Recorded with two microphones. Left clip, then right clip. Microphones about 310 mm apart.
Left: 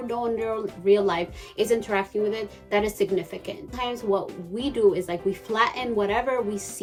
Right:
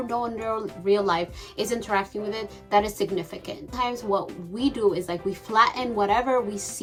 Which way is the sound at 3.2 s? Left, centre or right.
Centre.